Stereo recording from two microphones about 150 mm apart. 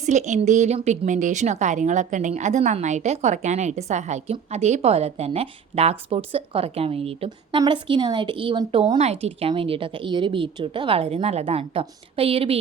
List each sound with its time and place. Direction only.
0.0 s a woman's voice: 50° right (ahead or behind)